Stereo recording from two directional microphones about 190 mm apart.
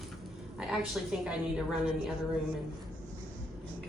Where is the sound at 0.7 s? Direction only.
5° right (ahead or behind).